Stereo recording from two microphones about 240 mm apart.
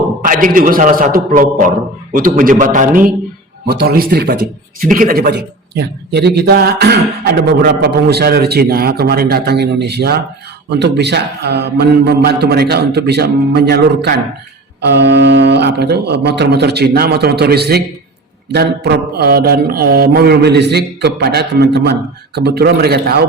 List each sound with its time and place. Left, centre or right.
0.2 s a man's voice: right